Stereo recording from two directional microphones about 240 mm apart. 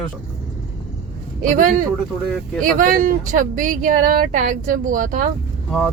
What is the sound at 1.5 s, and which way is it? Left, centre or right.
Speech, right.